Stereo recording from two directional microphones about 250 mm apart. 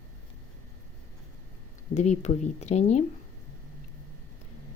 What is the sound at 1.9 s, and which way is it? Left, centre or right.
Speech, left.